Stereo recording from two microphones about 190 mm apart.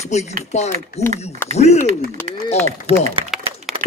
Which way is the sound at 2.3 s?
35° right (ahead or behind).